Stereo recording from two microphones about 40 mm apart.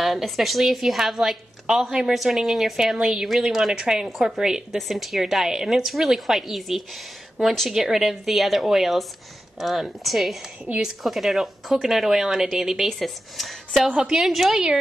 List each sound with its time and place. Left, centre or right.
0.0 s a woman's voice: centre
3.8 s a woman's voice: centre
4.7 s a woman's voice: centre
13.8 s a woman's voice: centre
14.2 s a woman's voice: centre